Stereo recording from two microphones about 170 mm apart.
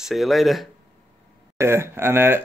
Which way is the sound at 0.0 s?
Centre (ahead or behind).